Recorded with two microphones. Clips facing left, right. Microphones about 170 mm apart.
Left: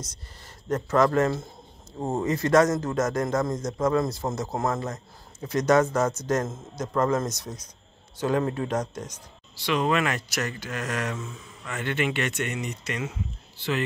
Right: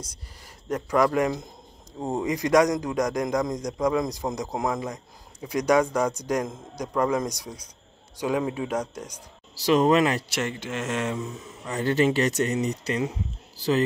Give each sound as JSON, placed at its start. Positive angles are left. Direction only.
{"t": 0.7, "sound": "a man's voice", "side_deg": -10}
{"t": 9.7, "sound": "speech", "side_deg": -35}
{"t": 11.7, "sound": "speech", "side_deg": -35}